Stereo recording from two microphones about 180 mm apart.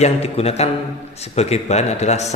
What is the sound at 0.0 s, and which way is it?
A man's voice, 35° left (ahead or behind).